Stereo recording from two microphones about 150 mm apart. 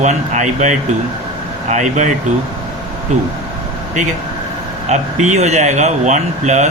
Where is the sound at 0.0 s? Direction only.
55° right (ahead or behind).